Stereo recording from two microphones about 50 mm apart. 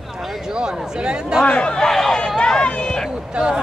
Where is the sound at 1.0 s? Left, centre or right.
Centre.